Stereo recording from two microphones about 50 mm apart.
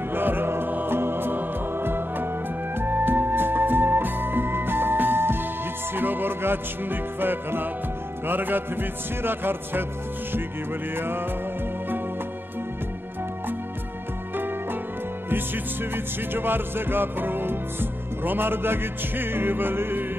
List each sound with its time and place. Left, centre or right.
0.1 s music: right
11.0 s music: right
15.2 s music: right